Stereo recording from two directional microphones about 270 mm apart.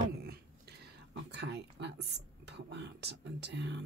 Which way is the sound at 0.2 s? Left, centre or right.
Right.